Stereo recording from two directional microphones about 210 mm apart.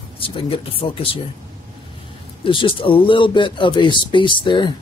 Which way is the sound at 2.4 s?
25° left (ahead or behind).